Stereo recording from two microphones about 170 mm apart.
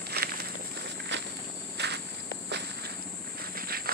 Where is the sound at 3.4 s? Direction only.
60° right (ahead or behind).